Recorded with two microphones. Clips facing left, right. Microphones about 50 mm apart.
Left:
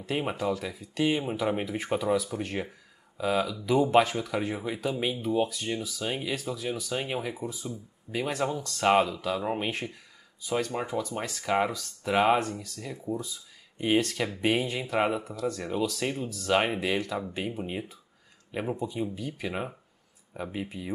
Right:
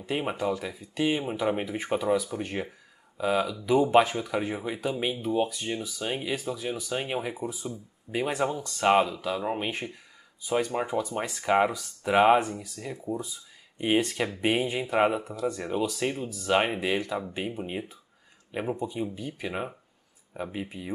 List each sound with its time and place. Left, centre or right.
0.0 s speech: centre